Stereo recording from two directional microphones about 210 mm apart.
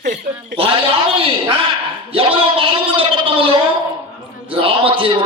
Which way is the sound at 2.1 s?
25° right (ahead or behind).